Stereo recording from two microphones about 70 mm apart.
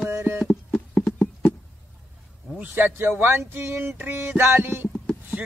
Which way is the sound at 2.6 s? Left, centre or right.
Right.